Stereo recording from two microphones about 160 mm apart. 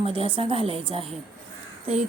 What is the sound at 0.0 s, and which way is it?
A woman's voice, 35° right (ahead or behind).